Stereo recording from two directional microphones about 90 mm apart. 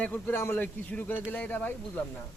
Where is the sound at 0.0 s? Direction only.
25° left (ahead or behind).